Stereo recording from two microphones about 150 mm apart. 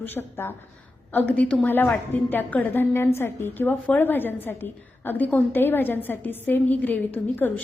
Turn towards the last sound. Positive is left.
turn(degrees=10)  # may be behind; listen again after turning